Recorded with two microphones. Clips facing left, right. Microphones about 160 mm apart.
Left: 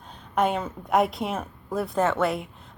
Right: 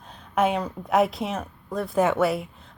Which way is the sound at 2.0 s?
10° right (ahead or behind).